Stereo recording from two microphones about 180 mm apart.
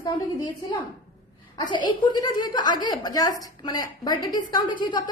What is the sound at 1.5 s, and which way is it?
A woman's voice, 25° left (ahead or behind).